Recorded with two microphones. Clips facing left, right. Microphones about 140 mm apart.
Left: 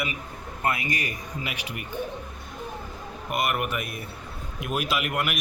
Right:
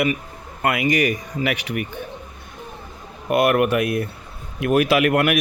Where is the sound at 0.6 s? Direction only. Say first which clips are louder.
Right 9 dB; 90° right; by 1.7 s 70° right (ahead or behind).